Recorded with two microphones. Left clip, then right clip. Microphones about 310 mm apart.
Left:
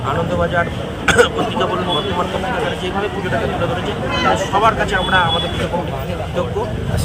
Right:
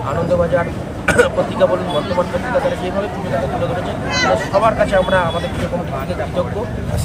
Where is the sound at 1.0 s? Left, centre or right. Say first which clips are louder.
Left 1 dB; centre.